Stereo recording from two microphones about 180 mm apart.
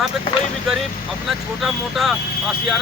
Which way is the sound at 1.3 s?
Centre (ahead or behind).